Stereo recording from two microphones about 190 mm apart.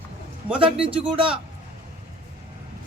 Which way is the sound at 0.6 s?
30° right (ahead or behind).